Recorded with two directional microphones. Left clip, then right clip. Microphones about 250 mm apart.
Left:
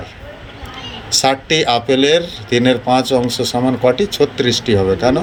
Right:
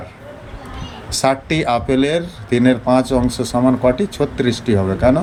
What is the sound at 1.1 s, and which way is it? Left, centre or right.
Speech, centre.